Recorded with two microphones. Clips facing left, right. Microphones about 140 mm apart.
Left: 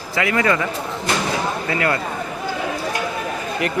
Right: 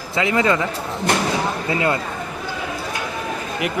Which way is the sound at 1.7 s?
20° right (ahead or behind).